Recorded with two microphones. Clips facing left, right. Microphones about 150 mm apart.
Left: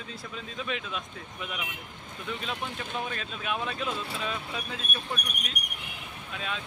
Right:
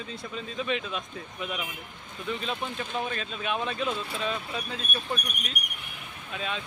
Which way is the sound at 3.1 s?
Centre (ahead or behind).